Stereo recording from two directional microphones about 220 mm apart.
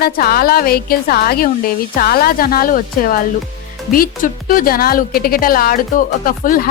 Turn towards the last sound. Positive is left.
turn(degrees=40)  # may be behind; listen again after turning